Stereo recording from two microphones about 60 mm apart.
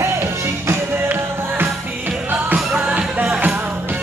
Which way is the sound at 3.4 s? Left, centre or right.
Right.